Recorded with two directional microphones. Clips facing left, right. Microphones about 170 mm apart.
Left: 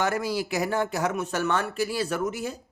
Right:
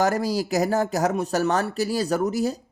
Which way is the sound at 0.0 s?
40° right (ahead or behind).